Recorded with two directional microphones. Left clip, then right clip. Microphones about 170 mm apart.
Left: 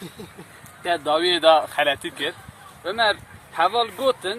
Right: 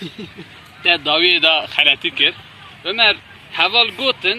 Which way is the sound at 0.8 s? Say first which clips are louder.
Right 7 dB; 30° left (ahead or behind).